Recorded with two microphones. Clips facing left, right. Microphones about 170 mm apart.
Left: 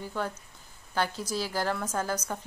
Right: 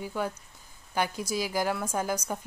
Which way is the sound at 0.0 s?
10° right (ahead or behind).